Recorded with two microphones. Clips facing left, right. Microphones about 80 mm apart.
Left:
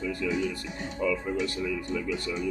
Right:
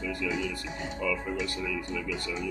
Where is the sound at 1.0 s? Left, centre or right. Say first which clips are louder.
Left 4 dB; centre.